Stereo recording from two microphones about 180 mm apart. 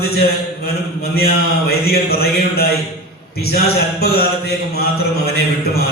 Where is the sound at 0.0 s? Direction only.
60° left (ahead or behind).